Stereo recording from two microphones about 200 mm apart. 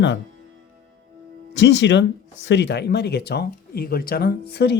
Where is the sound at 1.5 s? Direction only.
60° left (ahead or behind).